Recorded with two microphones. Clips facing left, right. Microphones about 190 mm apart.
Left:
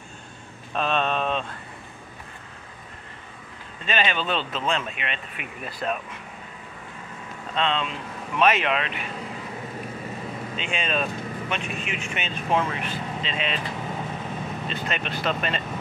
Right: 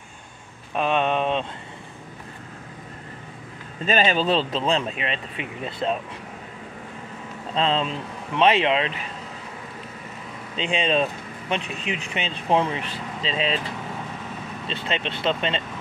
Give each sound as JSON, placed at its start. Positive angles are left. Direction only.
{"t": 0.7, "sound": "speech", "side_deg": -15}
{"t": 3.8, "sound": "speech", "side_deg": -40}
{"t": 7.5, "sound": "speech", "side_deg": -35}
{"t": 10.5, "sound": "speech", "side_deg": -30}
{"t": 14.7, "sound": "speech", "side_deg": -25}